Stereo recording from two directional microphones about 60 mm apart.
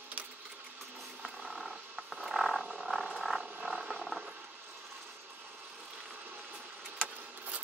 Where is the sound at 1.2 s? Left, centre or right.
Centre.